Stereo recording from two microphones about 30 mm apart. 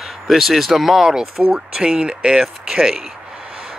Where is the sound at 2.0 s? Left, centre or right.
Right.